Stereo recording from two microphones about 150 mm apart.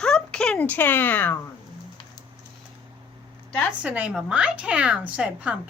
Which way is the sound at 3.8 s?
10° right (ahead or behind).